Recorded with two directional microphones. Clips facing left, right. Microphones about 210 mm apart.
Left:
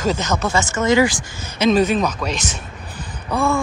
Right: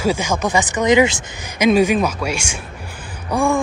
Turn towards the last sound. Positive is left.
turn(degrees=-15)  # may be behind; listen again after turning